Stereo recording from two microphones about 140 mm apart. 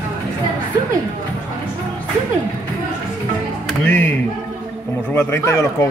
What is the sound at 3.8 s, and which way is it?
Speech, 15° left (ahead or behind).